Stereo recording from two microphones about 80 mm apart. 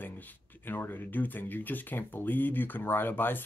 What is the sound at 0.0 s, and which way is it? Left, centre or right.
Speech, left.